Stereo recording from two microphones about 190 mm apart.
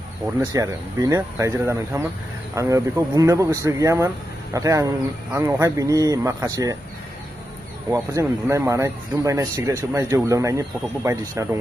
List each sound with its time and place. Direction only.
0.4 s speech: 15° right (ahead or behind)
7.9 s speech: 15° right (ahead or behind)